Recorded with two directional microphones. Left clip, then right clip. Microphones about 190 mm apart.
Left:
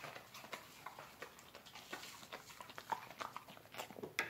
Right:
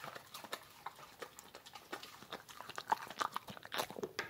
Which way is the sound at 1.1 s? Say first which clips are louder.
Right 2 dB; 50° right (ahead or behind).